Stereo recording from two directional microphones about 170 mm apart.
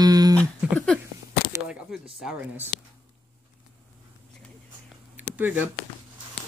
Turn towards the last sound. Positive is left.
turn(degrees=-10)  # may be behind; listen again after turning